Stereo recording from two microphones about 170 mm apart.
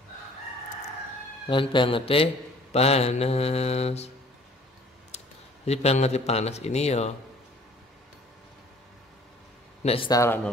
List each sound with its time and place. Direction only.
1.5 s mantra: 30° left (ahead or behind)
5.1 s a sound: 40° left (ahead or behind)
5.7 s mantra: 40° left (ahead or behind)
9.8 s mantra: 35° left (ahead or behind)
10.1 s speech: 15° left (ahead or behind)